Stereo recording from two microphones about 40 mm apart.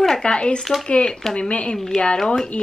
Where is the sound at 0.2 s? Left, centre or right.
Left.